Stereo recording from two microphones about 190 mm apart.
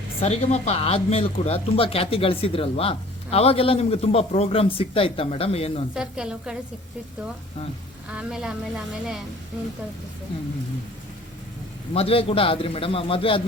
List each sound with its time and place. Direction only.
0.2 s speech: 35° left (ahead or behind)
5.9 s a woman's voice: 5° right (ahead or behind)
8.1 s a woman's voice: 5° right (ahead or behind)
11.9 s a man's voice: 30° left (ahead or behind)